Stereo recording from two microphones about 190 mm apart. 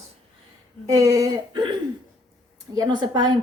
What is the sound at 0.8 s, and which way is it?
Speech, 20° right (ahead or behind).